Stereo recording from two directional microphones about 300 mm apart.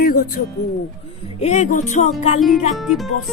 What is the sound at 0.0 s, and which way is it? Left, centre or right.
Music, left.